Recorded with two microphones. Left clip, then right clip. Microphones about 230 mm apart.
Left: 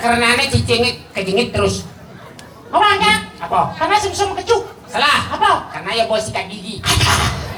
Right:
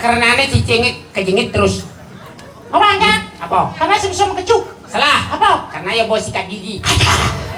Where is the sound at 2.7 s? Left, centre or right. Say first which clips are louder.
Right 2 dB; right.